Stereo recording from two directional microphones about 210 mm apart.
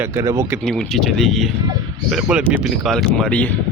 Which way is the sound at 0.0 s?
15° right (ahead or behind).